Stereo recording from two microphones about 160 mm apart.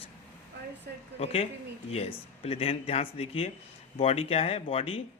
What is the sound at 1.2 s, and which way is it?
Speech, 40° left (ahead or behind).